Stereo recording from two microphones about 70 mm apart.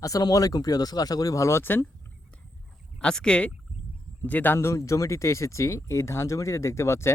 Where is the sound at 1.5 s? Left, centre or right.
Left.